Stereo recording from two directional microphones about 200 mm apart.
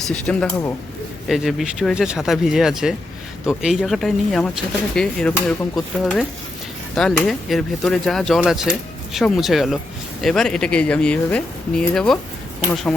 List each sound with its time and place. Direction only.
0.3 s speech: 5° left (ahead or behind)